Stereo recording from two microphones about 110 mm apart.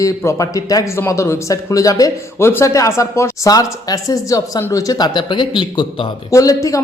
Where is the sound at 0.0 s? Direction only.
30° left (ahead or behind); by 6.1 s 45° left (ahead or behind).